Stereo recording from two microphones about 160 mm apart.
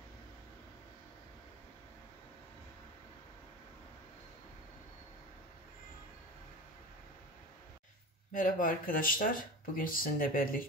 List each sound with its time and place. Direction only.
8.3 s speech: 55° left (ahead or behind)